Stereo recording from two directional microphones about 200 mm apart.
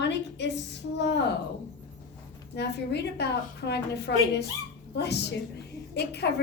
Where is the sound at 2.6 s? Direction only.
55° left (ahead or behind).